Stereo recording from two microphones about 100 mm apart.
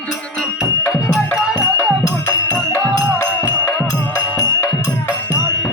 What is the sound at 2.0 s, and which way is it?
Music, 35° left (ahead or behind).